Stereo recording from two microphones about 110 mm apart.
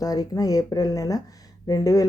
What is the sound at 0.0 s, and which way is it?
Speech, 35° left (ahead or behind).